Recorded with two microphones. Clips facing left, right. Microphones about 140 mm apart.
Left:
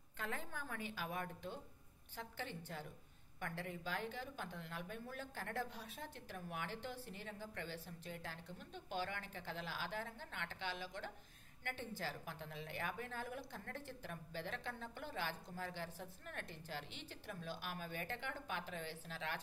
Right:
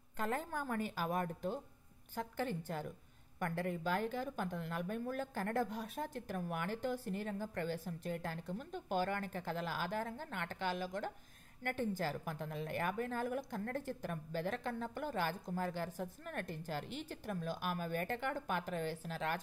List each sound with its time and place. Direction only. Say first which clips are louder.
0.2 s a woman's voice: right 8 dB; 45° right (ahead or behind)